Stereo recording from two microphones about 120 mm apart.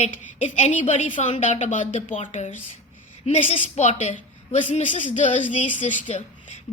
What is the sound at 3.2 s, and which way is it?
A woman's voice, 65° left (ahead or behind).